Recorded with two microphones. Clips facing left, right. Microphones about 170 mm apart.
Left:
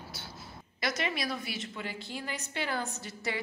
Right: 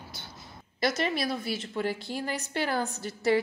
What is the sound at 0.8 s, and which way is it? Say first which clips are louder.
A woman's voice: right 5 dB; 35° right (ahead or behind).